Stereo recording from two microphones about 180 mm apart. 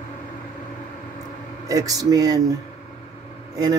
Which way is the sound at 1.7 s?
20° right (ahead or behind).